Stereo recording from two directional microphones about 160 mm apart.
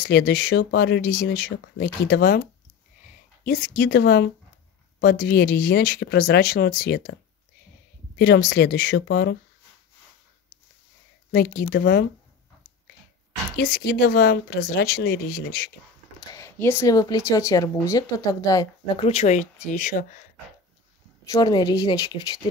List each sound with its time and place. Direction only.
0.0 s speech: 85° left
3.4 s speech: 65° left (ahead or behind); by 4.3 s 90° left
5.0 s speech: 80° left
8.2 s speech: 80° left
11.3 s speech: 85° left
13.6 s speech: 70° left (ahead or behind)
16.2 s speech: 20° left (ahead or behind)
18.9 s speech: 40° left (ahead or behind)
21.3 s speech: 25° left (ahead or behind)